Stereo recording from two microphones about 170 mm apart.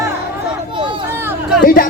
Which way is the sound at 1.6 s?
55° left (ahead or behind).